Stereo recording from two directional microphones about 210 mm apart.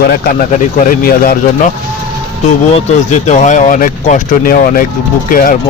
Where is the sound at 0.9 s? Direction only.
45° left (ahead or behind).